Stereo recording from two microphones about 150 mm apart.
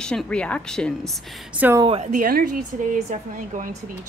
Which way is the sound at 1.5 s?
10° right (ahead or behind).